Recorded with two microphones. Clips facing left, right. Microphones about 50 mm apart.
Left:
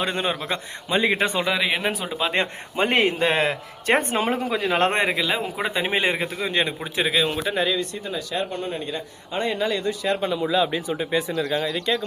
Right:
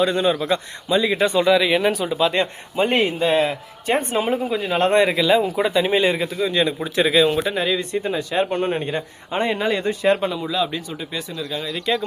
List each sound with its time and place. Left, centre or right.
0.0 s a man's voice: left
1.4 s speech: centre
2.7 s a man's voice: left
4.8 s a man's voice: left
5.0 s speech: centre
5.6 s a man's voice: left
6.9 s speech: centre
7.8 s speech: right
8.4 s speech: right
9.3 s speech: right
9.7 s speech: right
10.3 s speech: centre
11.3 s a man's voice: left
11.7 s speech: centre